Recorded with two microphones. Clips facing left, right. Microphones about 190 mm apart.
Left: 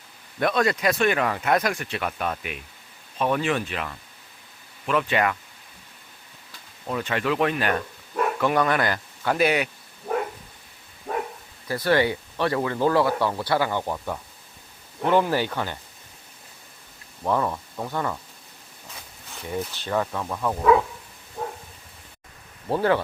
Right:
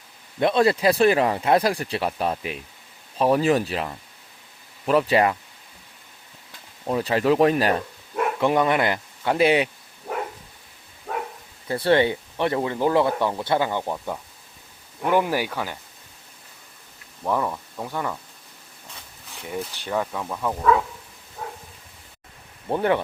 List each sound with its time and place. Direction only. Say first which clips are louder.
0.3 s speech: right 4 dB; 25° right (ahead or behind)
6.8 s speech: right 5 dB; 35° right (ahead or behind)
8.4 s speech: right 3 dB; 20° right (ahead or behind)
11.7 s speech: right 2 dB; 25° right (ahead or behind); by 15.8 s 5° right (ahead or behind)
17.2 s speech: even; 5° right (ahead or behind)
19.3 s speech: left 1 dB; 10° right (ahead or behind)
22.7 s speech: even; 20° right (ahead or behind)